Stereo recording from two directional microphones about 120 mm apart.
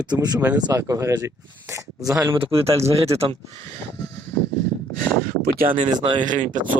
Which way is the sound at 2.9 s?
55° right (ahead or behind).